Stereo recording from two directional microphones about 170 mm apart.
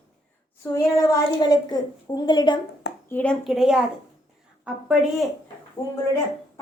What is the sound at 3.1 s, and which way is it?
Speech, 10° left (ahead or behind).